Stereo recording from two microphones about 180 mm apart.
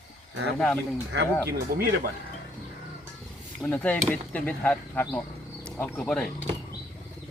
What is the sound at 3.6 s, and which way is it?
Speech, 10° left (ahead or behind).